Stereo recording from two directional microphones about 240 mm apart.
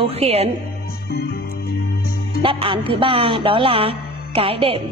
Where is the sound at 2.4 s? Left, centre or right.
Right.